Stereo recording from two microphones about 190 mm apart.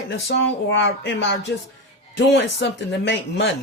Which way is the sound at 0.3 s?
70° left (ahead or behind).